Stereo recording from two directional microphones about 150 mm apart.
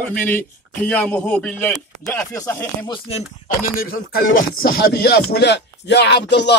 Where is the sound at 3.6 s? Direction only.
80° left.